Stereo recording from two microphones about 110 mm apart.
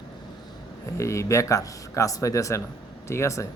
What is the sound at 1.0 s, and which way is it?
Speech, 30° left (ahead or behind).